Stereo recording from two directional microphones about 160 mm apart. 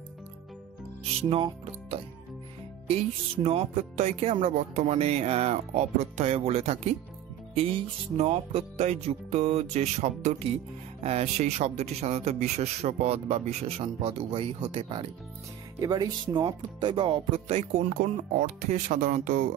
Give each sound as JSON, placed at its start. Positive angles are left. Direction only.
{"t": 1.3, "sound": "speech", "side_deg": -35}
{"t": 3.4, "sound": "speech", "side_deg": -40}
{"t": 15.8, "sound": "speech", "side_deg": -20}